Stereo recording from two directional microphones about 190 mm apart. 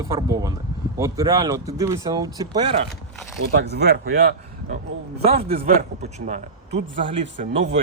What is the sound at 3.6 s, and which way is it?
Speech, 60° right (ahead or behind).